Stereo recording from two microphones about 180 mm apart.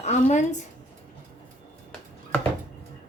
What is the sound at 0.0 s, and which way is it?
Speech, 40° left (ahead or behind).